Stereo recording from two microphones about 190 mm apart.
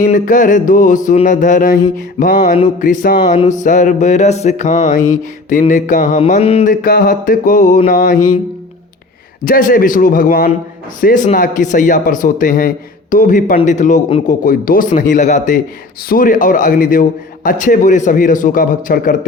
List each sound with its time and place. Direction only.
0.0 s a man's voice: 45° left (ahead or behind)
3.2 s a sound: 35° left (ahead or behind)
6.8 s a man's voice: 50° left (ahead or behind)
9.4 s a man's voice: 45° left (ahead or behind)
13.6 s a sound: 40° left (ahead or behind)
14.3 s a man's voice: 45° left (ahead or behind)